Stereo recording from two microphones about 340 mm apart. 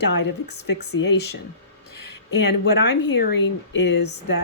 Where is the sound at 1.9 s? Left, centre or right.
Left.